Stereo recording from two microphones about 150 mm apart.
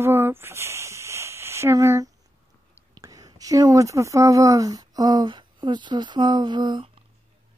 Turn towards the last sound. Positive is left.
turn(degrees=-35)  # may be behind; listen again after turning